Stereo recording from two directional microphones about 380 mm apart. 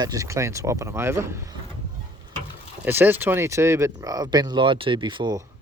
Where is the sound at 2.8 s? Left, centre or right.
Centre.